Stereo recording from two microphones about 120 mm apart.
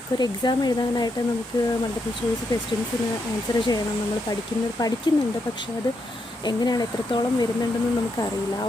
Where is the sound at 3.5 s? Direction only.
35° left (ahead or behind).